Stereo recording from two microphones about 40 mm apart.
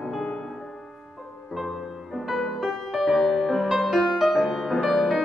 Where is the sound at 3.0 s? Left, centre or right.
Left.